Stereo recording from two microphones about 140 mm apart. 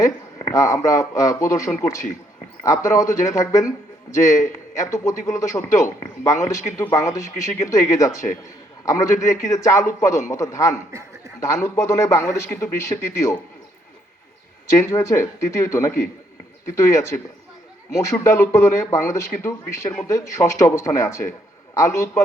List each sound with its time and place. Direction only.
0.0 s a man's voice: 20° left (ahead or behind)
14.7 s a man's voice: 20° left (ahead or behind)